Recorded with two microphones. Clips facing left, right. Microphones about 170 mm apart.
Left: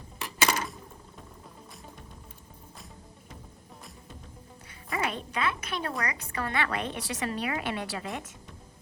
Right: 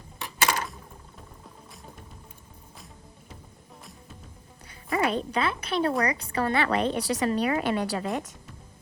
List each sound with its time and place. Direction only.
0.2 s cutlery: centre (ahead or behind)
4.9 s a woman's voice: 35° right (ahead or behind)